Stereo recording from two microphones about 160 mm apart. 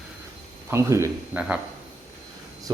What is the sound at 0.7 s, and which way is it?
Speech, 15° right (ahead or behind).